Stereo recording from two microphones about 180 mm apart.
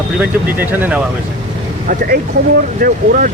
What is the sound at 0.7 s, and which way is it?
Speech, 10° right (ahead or behind).